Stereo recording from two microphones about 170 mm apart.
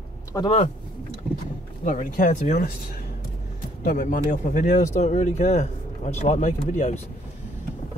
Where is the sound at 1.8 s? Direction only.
50° left (ahead or behind).